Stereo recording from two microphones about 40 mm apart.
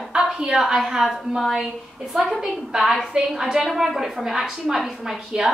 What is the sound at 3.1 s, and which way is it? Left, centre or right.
A woman's voice, centre.